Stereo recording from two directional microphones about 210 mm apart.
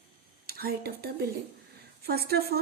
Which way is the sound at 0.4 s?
45° right (ahead or behind).